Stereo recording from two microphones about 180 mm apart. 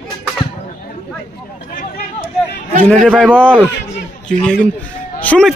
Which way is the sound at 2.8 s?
5° left (ahead or behind).